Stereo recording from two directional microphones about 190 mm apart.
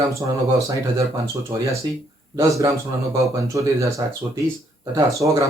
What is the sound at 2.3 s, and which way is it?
Speech, 15° right (ahead or behind).